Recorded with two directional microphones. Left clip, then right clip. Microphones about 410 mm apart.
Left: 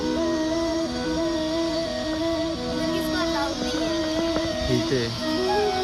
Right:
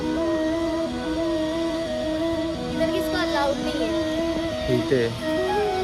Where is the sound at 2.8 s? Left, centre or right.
Centre.